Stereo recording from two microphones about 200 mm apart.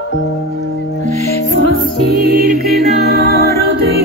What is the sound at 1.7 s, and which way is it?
Music, 50° right (ahead or behind).